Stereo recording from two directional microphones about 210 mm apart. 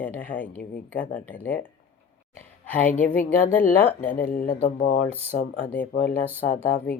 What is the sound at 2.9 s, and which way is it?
Speech, 5° left (ahead or behind).